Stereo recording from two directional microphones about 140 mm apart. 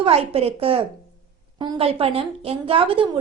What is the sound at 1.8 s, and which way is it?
Speech, 45° right (ahead or behind).